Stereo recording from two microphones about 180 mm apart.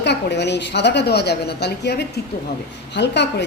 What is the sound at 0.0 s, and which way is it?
A man's voice, 70° left (ahead or behind).